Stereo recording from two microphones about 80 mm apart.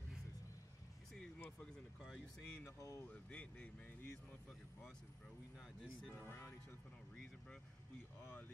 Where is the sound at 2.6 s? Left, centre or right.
Left.